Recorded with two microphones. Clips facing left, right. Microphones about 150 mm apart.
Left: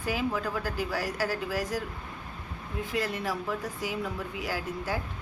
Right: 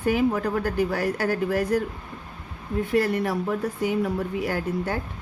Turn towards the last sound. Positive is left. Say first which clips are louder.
# right 6 dB
turn(degrees=-55)  # may be behind; listen again after turning